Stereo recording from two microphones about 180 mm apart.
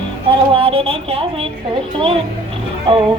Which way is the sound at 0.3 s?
30° right (ahead or behind).